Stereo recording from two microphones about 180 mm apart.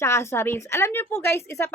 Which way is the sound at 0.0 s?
15° left (ahead or behind).